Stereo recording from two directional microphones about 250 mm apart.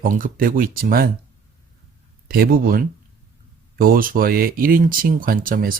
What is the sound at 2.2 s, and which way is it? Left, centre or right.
Speech, right.